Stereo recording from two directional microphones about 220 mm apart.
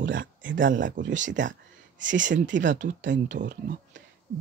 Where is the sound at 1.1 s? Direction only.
35° right (ahead or behind).